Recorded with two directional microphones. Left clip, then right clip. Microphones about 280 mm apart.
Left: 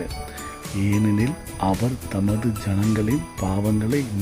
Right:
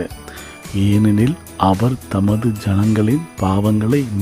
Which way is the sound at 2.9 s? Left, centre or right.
Centre.